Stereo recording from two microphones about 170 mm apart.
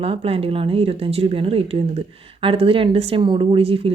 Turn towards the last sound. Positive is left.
turn(degrees=-35)  # may be behind; listen again after turning